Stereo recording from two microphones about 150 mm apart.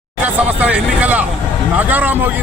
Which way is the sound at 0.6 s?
10° right (ahead or behind).